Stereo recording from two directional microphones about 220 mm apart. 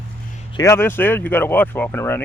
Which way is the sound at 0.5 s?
15° left (ahead or behind).